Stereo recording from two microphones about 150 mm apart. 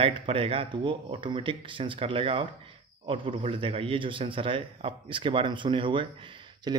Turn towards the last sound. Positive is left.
turn(degrees=-30)  # may be behind; listen again after turning